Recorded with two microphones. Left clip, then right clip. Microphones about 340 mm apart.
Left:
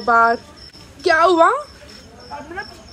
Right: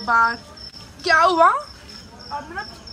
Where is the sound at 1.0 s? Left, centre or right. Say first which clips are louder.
Left 2 dB; centre.